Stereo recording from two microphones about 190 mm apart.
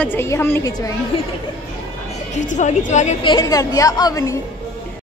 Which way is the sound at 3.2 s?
20° left (ahead or behind).